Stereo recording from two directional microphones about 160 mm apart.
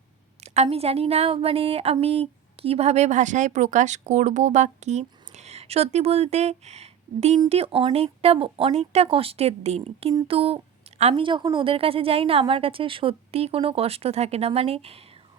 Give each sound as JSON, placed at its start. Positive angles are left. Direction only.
{"t": 0.4, "sound": "a woman's voice", "side_deg": -40}
{"t": 10.2, "sound": "a sound", "side_deg": -35}
{"t": 11.1, "sound": "a woman's voice", "side_deg": -30}